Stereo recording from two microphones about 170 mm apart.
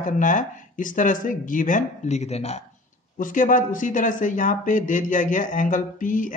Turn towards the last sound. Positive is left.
turn(degrees=50)  # may be behind; listen again after turning